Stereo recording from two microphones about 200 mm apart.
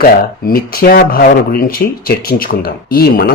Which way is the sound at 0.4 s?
45° left (ahead or behind).